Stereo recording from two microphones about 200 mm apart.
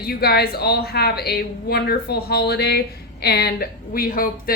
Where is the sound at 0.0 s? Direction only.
50° left (ahead or behind).